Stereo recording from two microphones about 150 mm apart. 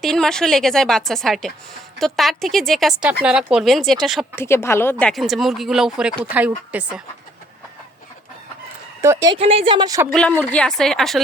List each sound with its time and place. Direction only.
0.0 s a woman's voice: 5° left (ahead or behind)
4.4 s a woman's voice: 15° left (ahead or behind); by 7.0 s 10° right (ahead or behind)
9.3 s speech: 40° right (ahead or behind)
10.1 s a woman's voice: 5° left (ahead or behind)